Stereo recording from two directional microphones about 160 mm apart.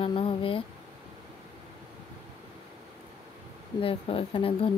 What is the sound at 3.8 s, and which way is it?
Speech, 35° left (ahead or behind).